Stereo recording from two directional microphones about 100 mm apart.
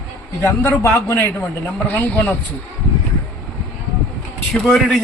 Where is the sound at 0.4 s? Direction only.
25° left (ahead or behind).